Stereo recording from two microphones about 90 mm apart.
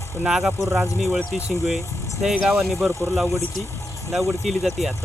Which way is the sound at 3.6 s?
30° left (ahead or behind).